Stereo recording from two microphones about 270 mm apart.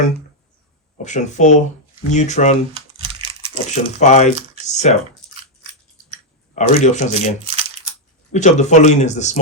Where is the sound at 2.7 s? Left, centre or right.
Centre.